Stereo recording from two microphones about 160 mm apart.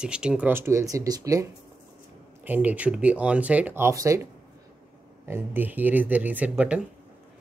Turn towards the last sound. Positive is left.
turn(degrees=-10)  # may be behind; listen again after turning